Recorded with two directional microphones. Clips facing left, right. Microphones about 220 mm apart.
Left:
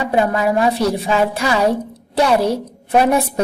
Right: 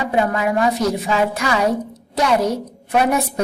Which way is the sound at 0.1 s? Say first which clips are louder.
Left 3 dB; 30° left (ahead or behind).